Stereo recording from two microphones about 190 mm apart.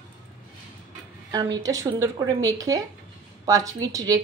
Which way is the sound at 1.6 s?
15° right (ahead or behind).